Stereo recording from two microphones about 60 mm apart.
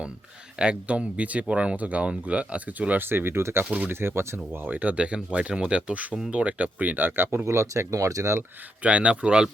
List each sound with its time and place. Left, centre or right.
0.6 s speech: centre
3.1 s speech: right
3.7 s speech: right
4.0 s speech: right
4.6 s speech: right
7.4 s speech: right
8.8 s speech: right